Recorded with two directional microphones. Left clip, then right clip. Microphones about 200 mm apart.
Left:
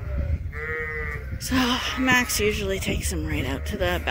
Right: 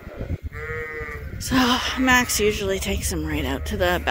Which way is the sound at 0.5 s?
35° left (ahead or behind).